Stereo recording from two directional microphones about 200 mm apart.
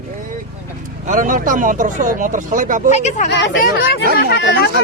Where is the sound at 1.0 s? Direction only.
40° right (ahead or behind).